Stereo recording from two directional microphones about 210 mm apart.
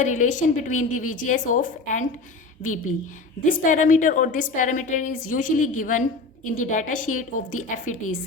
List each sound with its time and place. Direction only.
0.0 s a woman's voice: 35° left (ahead or behind)
3.4 s a woman's voice: 40° left (ahead or behind)